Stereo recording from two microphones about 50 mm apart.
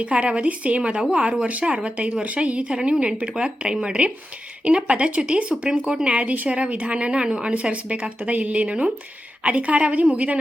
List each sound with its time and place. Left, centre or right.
0.0 s a woman's voice: right